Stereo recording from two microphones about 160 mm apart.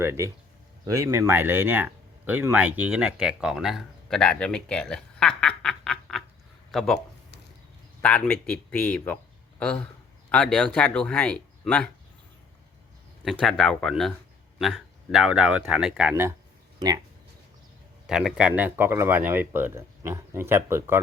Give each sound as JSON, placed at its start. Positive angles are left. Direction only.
{"t": 0.0, "sound": "speech", "side_deg": -15}
{"t": 8.0, "sound": "speech", "side_deg": 10}
{"t": 10.3, "sound": "speech", "side_deg": 5}
{"t": 13.4, "sound": "speech", "side_deg": 5}
{"t": 18.0, "sound": "speech", "side_deg": -5}